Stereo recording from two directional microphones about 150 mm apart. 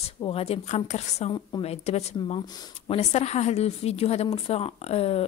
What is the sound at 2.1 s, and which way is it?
Speech, 35° left (ahead or behind).